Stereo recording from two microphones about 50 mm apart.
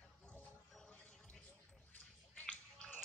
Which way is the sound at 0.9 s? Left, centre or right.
Left.